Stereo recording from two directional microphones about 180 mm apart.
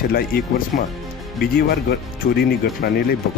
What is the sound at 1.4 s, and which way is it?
Speech, 60° left (ahead or behind).